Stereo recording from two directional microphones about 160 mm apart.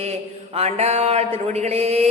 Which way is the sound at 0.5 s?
40° right (ahead or behind).